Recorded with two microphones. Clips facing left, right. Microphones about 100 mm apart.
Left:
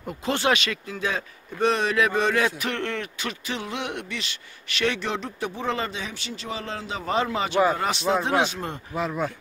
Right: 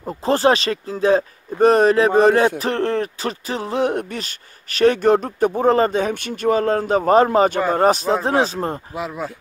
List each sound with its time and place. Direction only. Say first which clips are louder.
0.0 s speech: right 8 dB; 35° right (ahead or behind)
8.9 s speech: even; 5° right (ahead or behind)